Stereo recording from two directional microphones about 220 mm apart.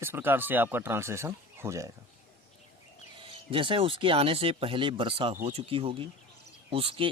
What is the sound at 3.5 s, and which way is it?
Speech, 25° right (ahead or behind).